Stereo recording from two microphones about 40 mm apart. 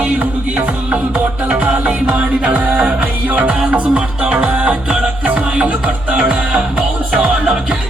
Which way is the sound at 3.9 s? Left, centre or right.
Right.